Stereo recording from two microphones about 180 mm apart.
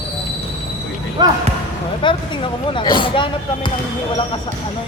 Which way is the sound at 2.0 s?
25° left (ahead or behind).